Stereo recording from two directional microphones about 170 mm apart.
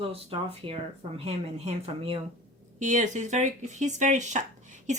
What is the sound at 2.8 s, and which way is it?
Speech, 45° right (ahead or behind).